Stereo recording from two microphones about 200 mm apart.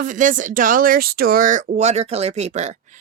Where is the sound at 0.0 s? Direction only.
40° right (ahead or behind).